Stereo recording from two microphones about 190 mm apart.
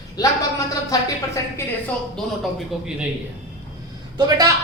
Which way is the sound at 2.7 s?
5° right (ahead or behind).